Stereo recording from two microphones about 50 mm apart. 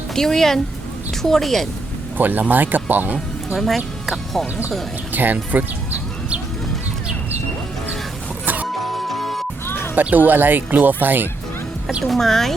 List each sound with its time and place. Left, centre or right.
0.1 s speech: centre
2.1 s speech: right
3.5 s speech: centre
5.1 s speech: right
8.6 s music: centre
9.6 s music: left
9.9 s speech: right
12.0 s speech: centre